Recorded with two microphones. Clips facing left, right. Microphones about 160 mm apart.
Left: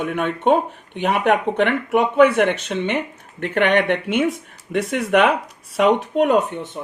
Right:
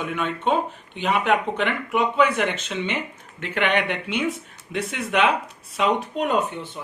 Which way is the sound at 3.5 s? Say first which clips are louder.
Left 5 dB; 45° left (ahead or behind).